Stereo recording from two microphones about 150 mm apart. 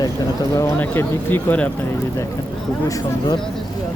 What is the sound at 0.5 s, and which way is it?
Speech, 15° left (ahead or behind).